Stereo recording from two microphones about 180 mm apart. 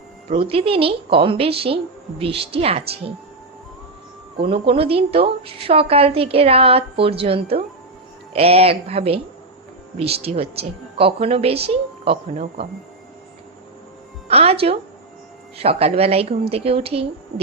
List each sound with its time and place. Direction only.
0.3 s a woman's voice: 30° right (ahead or behind)
4.4 s a woman's voice: 30° right (ahead or behind)
14.3 s a woman's voice: 35° right (ahead or behind)